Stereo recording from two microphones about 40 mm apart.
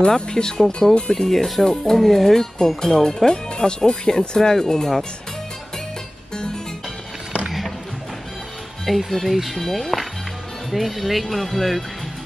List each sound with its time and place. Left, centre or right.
0.1 s speech: centre
4.4 s speech: centre
6.3 s music: centre
7.4 s music: centre
8.8 s speech: centre